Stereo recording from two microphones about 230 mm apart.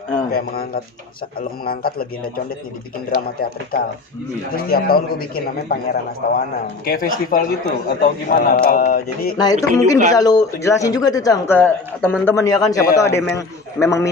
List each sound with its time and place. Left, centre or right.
0.3 s a man's voice: left
3.4 s a man's voice: left
9.4 s speech: centre